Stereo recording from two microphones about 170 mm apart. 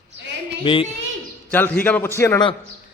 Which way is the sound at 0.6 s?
30° left (ahead or behind).